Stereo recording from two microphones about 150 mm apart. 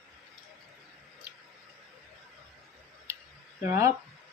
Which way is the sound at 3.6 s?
20° right (ahead or behind).